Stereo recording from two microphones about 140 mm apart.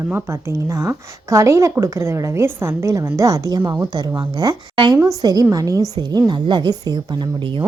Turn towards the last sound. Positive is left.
turn(degrees=-30)  # may be behind; listen again after turning